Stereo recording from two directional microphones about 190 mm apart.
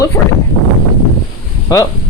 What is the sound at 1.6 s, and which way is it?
Speech, 20° left (ahead or behind).